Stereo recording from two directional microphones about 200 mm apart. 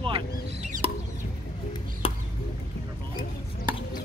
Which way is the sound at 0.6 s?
35° right (ahead or behind).